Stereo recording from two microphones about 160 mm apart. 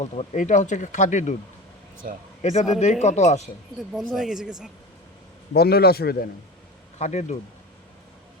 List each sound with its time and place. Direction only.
0.0 s speech: 50° left (ahead or behind)
2.4 s a man's voice: 45° left (ahead or behind)
3.8 s speech: centre (ahead or behind)
5.5 s a man's voice: 80° left
7.0 s speech: 45° left (ahead or behind)